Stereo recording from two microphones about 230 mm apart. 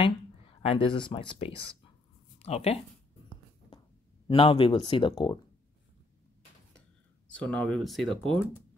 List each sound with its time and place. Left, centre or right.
0.0 s speech: left
4.3 s speech: left
7.2 s speech: centre